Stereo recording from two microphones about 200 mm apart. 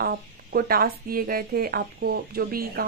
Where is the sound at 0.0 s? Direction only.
50° right (ahead or behind).